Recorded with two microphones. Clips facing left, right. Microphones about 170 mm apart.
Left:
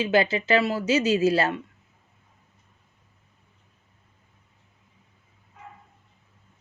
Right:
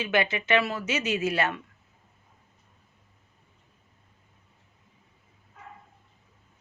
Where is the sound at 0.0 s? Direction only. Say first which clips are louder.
Left 5 dB; 30° left (ahead or behind).